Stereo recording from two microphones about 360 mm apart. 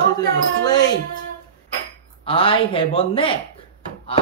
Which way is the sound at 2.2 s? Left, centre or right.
Centre.